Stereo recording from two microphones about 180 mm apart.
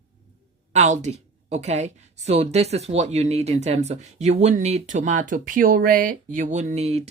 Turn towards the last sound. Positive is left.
turn(degrees=-35)  # may be behind; listen again after turning